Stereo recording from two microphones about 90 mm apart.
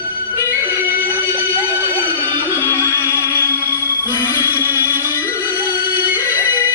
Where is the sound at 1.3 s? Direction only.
25° right (ahead or behind).